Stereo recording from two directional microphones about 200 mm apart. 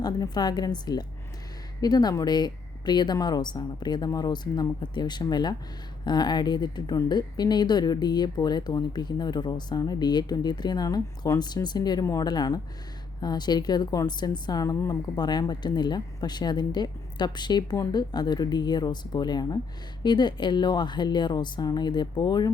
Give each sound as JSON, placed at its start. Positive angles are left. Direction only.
{"t": 0.0, "sound": "a woman's voice", "side_deg": 20}